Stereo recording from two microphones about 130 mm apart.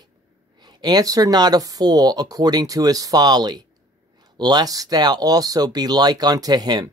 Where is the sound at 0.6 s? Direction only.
35° right (ahead or behind).